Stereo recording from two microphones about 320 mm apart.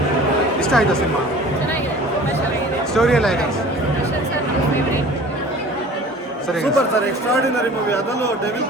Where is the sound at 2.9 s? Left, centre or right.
Centre.